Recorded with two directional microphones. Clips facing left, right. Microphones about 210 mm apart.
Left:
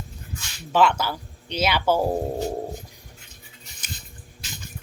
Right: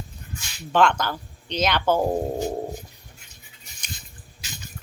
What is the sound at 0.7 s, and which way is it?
Speech, 5° left (ahead or behind).